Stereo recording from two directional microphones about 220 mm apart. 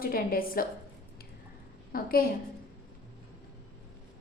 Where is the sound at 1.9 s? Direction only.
40° left (ahead or behind).